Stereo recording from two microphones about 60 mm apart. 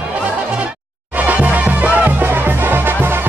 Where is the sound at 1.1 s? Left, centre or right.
Right.